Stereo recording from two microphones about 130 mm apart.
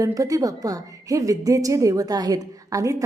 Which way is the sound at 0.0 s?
25° right (ahead or behind).